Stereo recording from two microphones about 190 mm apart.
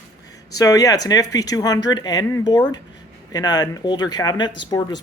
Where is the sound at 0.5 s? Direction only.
20° left (ahead or behind).